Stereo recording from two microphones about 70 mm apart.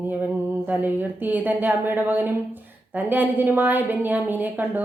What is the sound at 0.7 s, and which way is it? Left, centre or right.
A woman's voice, right.